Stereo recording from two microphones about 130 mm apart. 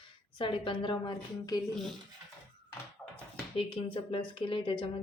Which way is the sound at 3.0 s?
15° left (ahead or behind).